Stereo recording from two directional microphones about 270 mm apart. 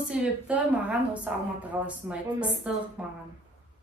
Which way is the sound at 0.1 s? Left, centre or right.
Centre.